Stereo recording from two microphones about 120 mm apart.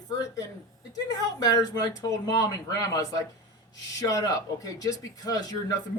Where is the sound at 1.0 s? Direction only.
30° left (ahead or behind).